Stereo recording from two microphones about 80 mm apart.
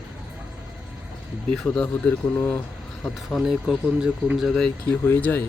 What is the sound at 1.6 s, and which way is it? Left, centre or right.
Speech, centre.